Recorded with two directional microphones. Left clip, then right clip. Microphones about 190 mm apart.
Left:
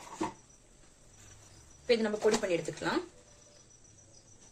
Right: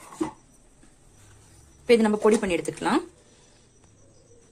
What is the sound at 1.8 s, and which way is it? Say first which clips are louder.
Speech: right 9 dB; 50° right (ahead or behind).